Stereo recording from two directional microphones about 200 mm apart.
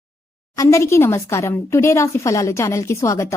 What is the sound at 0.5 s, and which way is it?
Speech, 15° left (ahead or behind).